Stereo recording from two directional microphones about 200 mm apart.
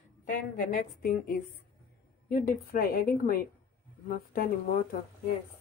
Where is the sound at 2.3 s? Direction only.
50° left (ahead or behind).